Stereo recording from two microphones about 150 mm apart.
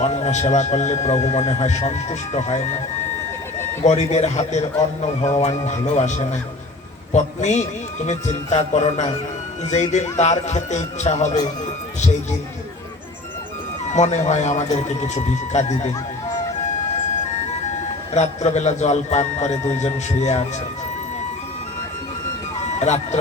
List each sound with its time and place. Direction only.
0.0 s speech: 50° left (ahead or behind)
3.8 s speech: 50° left (ahead or behind)
13.9 s speech: 50° left (ahead or behind)
18.1 s speech: 50° left (ahead or behind)
22.6 s music: 50° left (ahead or behind)